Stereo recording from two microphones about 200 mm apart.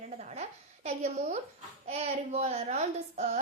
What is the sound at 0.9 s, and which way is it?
A child's voice, 35° right (ahead or behind).